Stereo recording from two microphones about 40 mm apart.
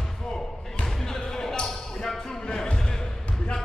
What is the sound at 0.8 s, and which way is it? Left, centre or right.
Basketball bounce, centre.